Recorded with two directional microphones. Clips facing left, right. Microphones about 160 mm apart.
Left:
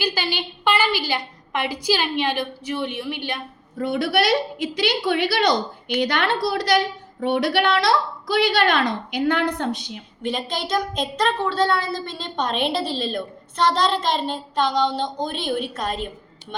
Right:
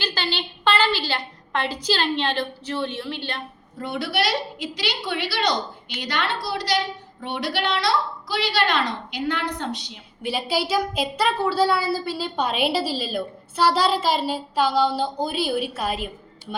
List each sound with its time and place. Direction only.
0.0 s a woman's voice: 10° left (ahead or behind)
3.8 s a woman's voice: 50° left (ahead or behind)
10.2 s a woman's voice: 10° right (ahead or behind)